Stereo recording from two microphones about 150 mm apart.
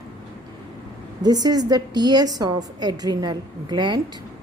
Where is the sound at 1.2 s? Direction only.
25° right (ahead or behind).